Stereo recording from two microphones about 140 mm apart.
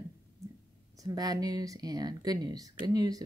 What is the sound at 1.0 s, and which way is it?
Speech, 25° right (ahead or behind).